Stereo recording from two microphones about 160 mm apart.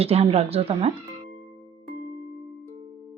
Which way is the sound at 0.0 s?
40° right (ahead or behind).